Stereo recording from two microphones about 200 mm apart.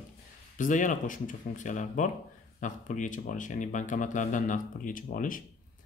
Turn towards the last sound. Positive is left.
turn(degrees=45)  # may be behind; listen again after turning